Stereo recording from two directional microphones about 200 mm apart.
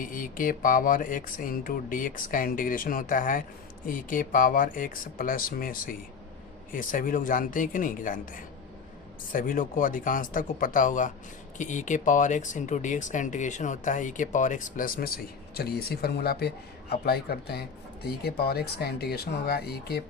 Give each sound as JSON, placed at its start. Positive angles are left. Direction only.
{"t": 0.0, "sound": "speech", "side_deg": 45}